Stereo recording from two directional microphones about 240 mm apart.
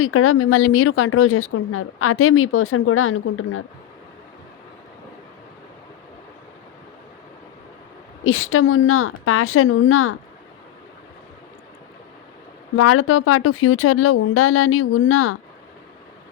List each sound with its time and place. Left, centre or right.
0.0 s a woman's voice: left
8.2 s a woman's voice: left
12.7 s a woman's voice: left